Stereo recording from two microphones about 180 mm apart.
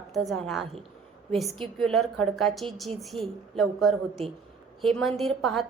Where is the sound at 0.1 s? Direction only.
Centre (ahead or behind).